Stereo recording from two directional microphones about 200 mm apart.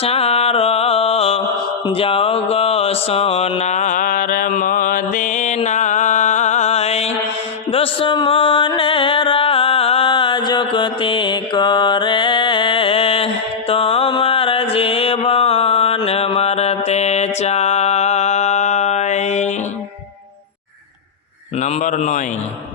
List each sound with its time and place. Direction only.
0.0 s music: 30° left (ahead or behind)
1.9 s mantra: 30° left (ahead or behind)
5.5 s music: 35° left (ahead or behind)
21.6 s a sound: 35° left (ahead or behind)